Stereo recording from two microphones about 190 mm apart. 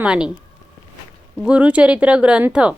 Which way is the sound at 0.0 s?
5° right (ahead or behind).